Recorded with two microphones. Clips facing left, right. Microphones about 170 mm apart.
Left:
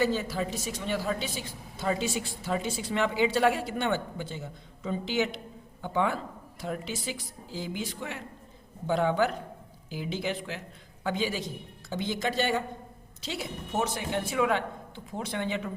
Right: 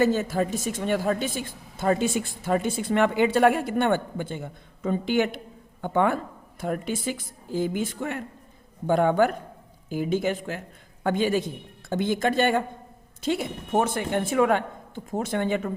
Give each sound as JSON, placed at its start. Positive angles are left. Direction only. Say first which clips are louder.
{"t": 0.0, "sound": "a woman's voice", "louder": "right 5 dB", "side_deg": -50}